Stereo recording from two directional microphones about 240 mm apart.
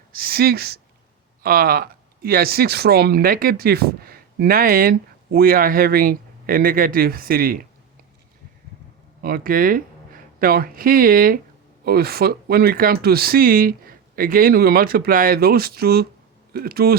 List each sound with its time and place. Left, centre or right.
0.1 s speech: right
9.2 s speech: right